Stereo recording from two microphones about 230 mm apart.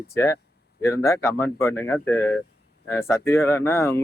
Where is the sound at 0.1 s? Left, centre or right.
Centre.